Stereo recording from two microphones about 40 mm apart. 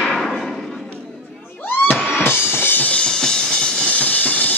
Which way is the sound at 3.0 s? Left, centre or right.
Left.